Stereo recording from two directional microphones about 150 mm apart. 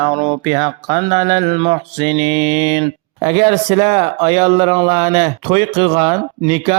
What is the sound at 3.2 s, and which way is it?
Mantra, 45° right (ahead or behind).